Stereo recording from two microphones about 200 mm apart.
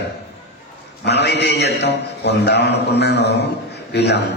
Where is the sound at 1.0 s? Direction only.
55° left (ahead or behind).